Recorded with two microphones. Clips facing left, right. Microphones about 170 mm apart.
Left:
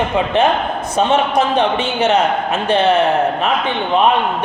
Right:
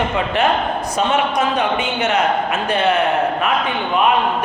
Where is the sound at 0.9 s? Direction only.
30° left (ahead or behind).